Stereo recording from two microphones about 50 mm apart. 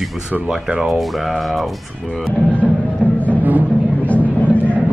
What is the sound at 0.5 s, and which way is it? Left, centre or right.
Speech, centre.